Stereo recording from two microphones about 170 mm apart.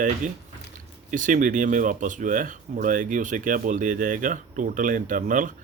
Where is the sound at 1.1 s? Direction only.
50° right (ahead or behind).